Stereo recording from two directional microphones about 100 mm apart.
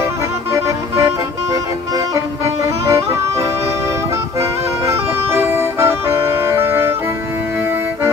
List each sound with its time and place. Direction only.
0.0 s music: 30° right (ahead or behind)
2.6 s music: 30° right (ahead or behind)